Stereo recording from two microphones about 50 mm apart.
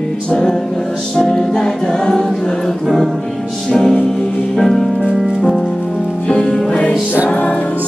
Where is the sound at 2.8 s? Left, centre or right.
Centre.